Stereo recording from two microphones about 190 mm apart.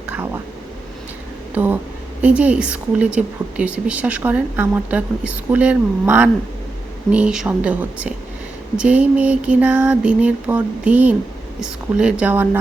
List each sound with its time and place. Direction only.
1.5 s a woman's voice: 10° right (ahead or behind)